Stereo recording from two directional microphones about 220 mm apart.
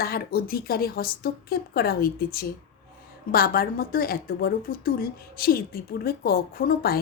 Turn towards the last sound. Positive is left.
turn(degrees=40)  # may be behind; listen again after turning